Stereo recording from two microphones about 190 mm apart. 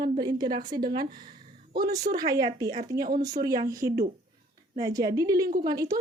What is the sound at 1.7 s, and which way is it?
Speech, 45° right (ahead or behind).